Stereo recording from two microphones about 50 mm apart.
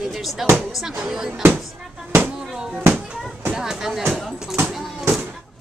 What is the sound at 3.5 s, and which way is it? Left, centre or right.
Speech, centre.